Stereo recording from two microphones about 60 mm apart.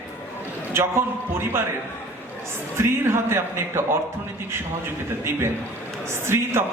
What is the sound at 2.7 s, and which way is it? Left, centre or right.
Speech, right.